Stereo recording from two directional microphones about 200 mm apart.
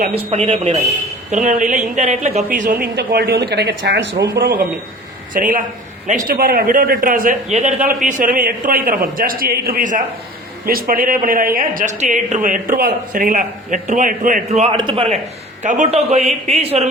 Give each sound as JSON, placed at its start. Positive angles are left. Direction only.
{"t": 0.1, "sound": "a man's voice", "side_deg": -30}
{"t": 2.8, "sound": "a woman's voice", "side_deg": -55}
{"t": 5.3, "sound": "a man's voice", "side_deg": -40}